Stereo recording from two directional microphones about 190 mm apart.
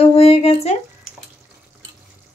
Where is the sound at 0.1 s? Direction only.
30° left (ahead or behind).